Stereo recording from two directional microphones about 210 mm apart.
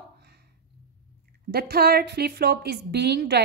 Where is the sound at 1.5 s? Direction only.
50° right (ahead or behind).